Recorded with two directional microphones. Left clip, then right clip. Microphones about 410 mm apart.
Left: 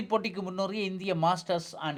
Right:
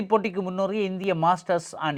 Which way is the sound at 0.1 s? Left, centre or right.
Right.